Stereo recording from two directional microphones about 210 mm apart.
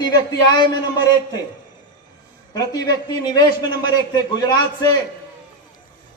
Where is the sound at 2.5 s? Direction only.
20° left (ahead or behind).